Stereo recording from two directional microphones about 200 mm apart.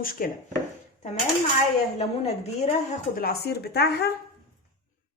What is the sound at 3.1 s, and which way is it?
Speech, 50° left (ahead or behind).